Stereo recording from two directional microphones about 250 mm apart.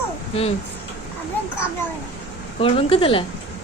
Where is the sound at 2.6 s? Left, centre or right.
Left.